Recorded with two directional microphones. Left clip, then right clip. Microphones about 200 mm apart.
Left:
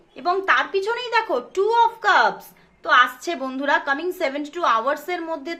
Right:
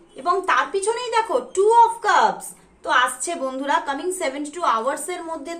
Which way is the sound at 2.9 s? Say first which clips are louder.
Left 2 dB; 45° left (ahead or behind).